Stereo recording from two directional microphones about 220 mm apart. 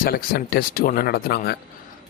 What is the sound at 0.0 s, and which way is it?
Speech, 45° left (ahead or behind).